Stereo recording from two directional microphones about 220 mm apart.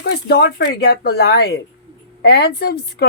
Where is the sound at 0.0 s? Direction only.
45° left (ahead or behind).